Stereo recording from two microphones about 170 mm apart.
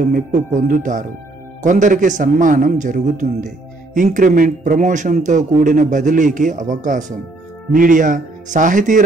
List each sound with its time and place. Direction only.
0.0 s a man's voice: 55° right (ahead or behind)